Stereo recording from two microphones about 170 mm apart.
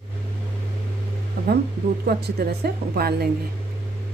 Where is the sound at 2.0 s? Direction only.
65° right (ahead or behind).